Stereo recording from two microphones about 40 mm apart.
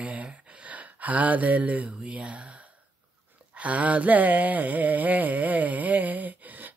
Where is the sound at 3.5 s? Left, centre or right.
Right.